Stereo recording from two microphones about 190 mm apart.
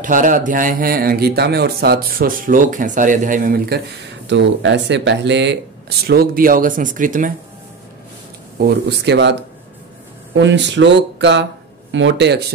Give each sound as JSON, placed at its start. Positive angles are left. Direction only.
{"t": 0.0, "sound": "a man's voice", "side_deg": -45}
{"t": 4.3, "sound": "speech", "side_deg": -70}
{"t": 8.5, "sound": "speech", "side_deg": -60}